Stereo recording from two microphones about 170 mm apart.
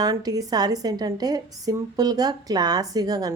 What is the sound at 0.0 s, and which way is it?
A woman's voice, 20° right (ahead or behind).